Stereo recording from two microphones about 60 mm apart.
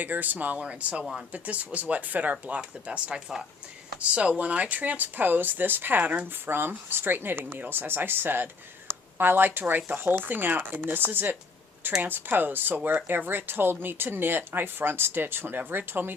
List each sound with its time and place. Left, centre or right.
0.0 s speech: right
2.3 s speech: centre; by 16.1 s right